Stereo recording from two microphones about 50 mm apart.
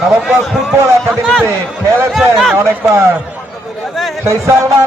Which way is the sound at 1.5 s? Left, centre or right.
Right.